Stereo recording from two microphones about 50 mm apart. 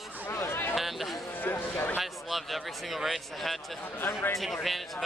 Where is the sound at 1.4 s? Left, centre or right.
Left.